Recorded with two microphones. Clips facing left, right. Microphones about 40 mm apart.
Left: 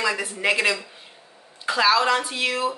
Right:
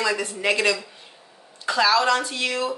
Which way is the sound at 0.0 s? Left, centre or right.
Centre.